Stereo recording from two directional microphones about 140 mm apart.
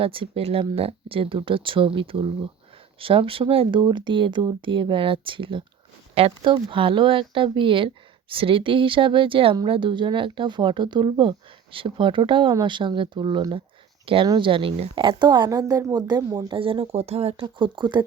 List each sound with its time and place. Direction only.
0.0 s speech: 40° right (ahead or behind)
17.4 s speech: 35° right (ahead or behind)